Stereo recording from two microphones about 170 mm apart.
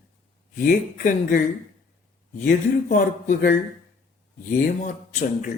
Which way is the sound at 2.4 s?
50° left (ahead or behind).